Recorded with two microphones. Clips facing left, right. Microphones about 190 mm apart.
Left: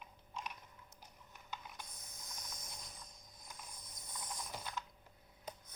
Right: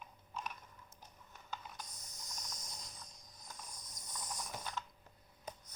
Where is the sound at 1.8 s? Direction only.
55° left (ahead or behind).